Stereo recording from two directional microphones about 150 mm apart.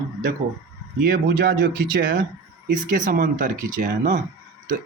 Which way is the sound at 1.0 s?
65° right (ahead or behind).